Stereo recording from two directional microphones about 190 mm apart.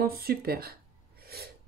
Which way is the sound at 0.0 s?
50° right (ahead or behind).